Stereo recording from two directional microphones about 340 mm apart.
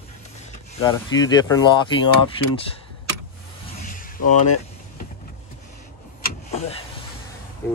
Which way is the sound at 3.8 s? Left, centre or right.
Left.